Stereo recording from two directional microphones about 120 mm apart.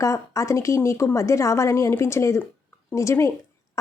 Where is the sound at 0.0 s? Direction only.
25° left (ahead or behind).